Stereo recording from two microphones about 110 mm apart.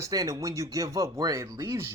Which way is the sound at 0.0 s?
30° right (ahead or behind).